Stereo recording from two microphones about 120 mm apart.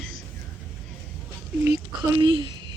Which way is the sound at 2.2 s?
45° right (ahead or behind).